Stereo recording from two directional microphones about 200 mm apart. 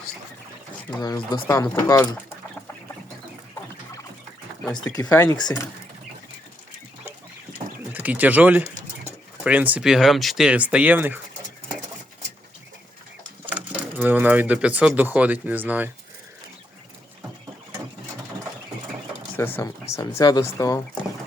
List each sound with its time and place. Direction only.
1.0 s speech: 20° left (ahead or behind)
4.9 s speech: 15° left (ahead or behind)
7.9 s speech: 10° right (ahead or behind)
13.5 s speech: 5° right (ahead or behind)
19.4 s speech: 10° left (ahead or behind)